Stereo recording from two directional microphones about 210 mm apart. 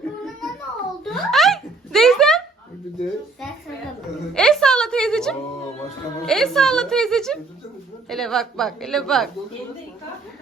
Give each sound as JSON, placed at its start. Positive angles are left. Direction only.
{"t": 1.0, "sound": "a sound", "side_deg": 0}
{"t": 4.4, "sound": "music", "side_deg": 5}
{"t": 6.2, "sound": "a woman's voice", "side_deg": 0}